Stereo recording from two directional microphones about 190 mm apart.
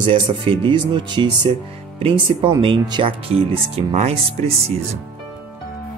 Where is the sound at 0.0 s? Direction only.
30° right (ahead or behind).